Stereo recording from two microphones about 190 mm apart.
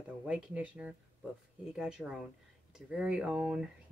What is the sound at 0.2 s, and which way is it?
Speech, 5° right (ahead or behind).